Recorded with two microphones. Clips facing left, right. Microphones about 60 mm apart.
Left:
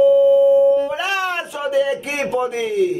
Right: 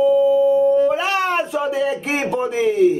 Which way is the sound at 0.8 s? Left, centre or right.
Right.